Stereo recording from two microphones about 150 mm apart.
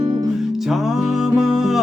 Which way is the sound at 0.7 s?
Centre (ahead or behind).